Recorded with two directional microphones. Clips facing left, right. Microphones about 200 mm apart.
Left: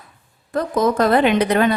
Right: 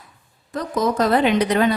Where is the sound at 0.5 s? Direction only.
55° left (ahead or behind).